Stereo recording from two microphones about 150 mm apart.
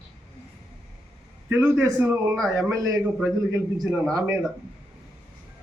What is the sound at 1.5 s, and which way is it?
A man's voice, 20° right (ahead or behind).